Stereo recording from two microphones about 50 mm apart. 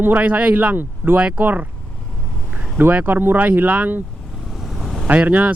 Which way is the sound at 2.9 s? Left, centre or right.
Right.